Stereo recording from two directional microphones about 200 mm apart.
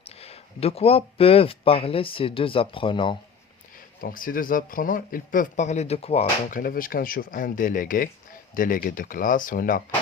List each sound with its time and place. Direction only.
0.0 s speech: 30° left (ahead or behind)
4.0 s speech: 45° left (ahead or behind)
6.6 s speech: 45° left (ahead or behind)